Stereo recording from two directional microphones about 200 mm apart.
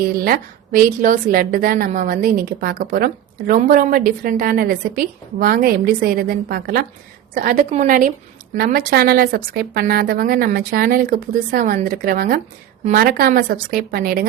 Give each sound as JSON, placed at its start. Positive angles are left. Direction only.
{"t": 0.3, "sound": "a woman's voice", "side_deg": -45}